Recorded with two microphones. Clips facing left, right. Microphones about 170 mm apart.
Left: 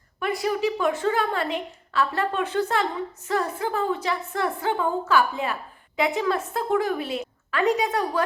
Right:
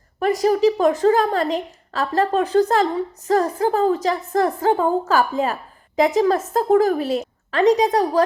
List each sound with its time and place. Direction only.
0.2 s a woman's voice: 40° right (ahead or behind)